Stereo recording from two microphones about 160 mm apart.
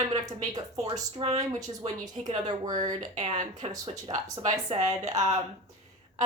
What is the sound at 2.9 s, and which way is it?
Speech, 45° right (ahead or behind).